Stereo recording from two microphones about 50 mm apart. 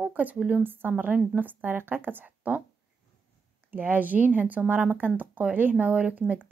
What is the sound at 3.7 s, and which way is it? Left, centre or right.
Speech, right.